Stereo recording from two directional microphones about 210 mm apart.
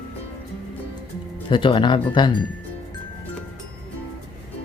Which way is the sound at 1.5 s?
25° left (ahead or behind).